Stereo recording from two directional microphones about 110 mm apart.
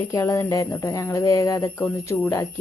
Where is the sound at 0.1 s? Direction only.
25° left (ahead or behind).